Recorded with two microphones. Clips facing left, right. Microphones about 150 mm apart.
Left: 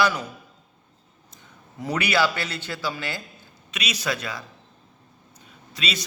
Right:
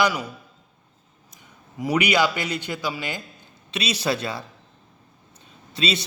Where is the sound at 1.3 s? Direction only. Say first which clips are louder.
Even; 10° right (ahead or behind).